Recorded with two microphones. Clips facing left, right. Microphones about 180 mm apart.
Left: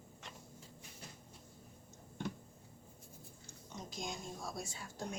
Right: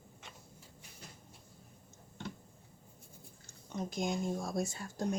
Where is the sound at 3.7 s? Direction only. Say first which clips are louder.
Right 10 dB; 55° right (ahead or behind).